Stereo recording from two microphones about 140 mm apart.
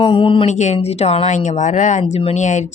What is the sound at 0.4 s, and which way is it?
Speech, 55° left (ahead or behind).